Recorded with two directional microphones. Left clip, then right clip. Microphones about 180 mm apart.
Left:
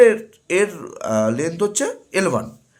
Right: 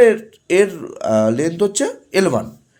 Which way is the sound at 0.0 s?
20° right (ahead or behind).